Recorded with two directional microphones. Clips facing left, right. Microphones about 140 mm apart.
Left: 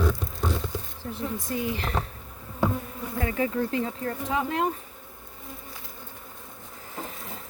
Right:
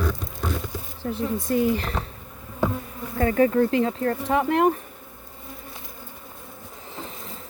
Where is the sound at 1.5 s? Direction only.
40° right (ahead or behind).